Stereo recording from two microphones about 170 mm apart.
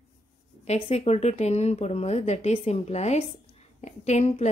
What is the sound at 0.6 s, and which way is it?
Speech, 40° left (ahead or behind).